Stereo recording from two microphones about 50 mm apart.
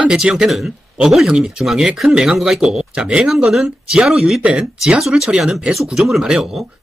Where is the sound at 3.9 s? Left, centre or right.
Centre.